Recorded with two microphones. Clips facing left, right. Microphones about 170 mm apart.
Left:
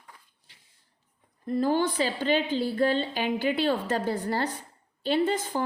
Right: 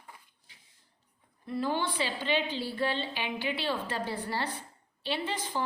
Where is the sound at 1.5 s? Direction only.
45° left (ahead or behind).